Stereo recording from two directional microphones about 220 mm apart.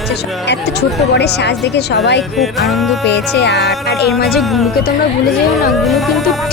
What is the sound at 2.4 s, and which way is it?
Music, centre (ahead or behind).